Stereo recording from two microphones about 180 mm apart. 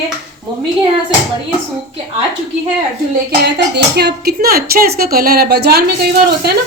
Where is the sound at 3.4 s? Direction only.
65° right (ahead or behind).